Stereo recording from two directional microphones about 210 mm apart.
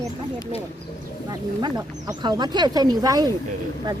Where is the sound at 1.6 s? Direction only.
20° right (ahead or behind).